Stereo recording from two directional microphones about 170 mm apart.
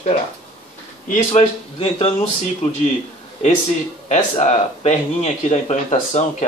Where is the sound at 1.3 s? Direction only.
40° left (ahead or behind).